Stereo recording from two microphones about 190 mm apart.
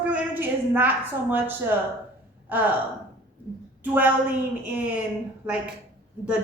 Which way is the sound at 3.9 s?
10° right (ahead or behind).